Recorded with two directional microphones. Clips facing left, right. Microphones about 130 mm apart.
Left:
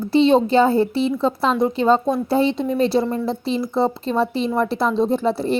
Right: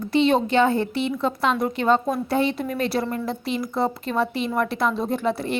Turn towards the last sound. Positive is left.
turn(degrees=30)  # may be behind; listen again after turning